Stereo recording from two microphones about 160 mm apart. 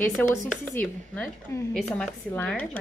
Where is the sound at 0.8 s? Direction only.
10° left (ahead or behind).